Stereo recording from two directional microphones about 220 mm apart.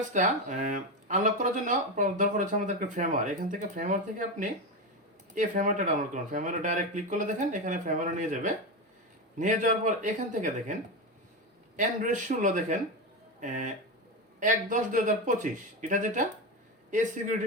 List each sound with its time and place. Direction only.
0.1 s speech: 35° right (ahead or behind)
11.8 s speech: 35° right (ahead or behind)